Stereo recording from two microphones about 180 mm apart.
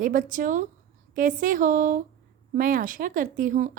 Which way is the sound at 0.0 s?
50° right (ahead or behind).